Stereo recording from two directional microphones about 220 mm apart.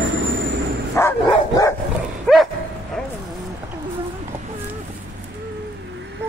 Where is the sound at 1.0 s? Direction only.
15° left (ahead or behind).